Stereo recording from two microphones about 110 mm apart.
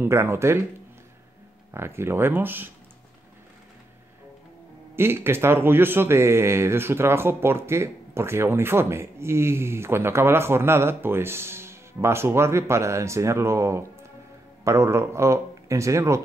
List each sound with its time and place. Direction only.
0.0 s speech: 20° right (ahead or behind)
1.7 s speech: 25° right (ahead or behind)
4.9 s speech: 20° right (ahead or behind)